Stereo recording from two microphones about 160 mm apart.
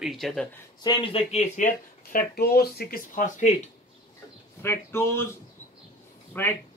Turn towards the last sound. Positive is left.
turn(degrees=10)  # may be behind; listen again after turning